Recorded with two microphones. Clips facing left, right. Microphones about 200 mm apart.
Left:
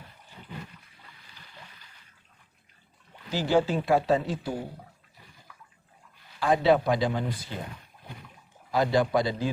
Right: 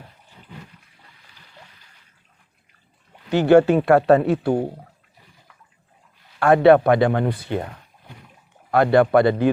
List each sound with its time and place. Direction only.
3.2 s speech: 65° right (ahead or behind)
6.4 s speech: 60° right (ahead or behind)
8.7 s speech: 60° right (ahead or behind)